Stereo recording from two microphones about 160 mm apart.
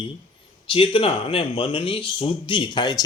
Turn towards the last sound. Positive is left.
turn(degrees=25)  # may be behind; listen again after turning